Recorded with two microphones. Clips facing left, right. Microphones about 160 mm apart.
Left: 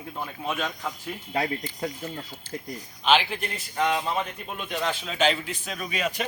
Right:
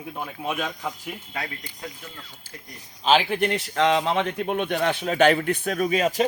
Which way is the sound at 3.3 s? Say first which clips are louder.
Right 9 dB; 75° right (ahead or behind).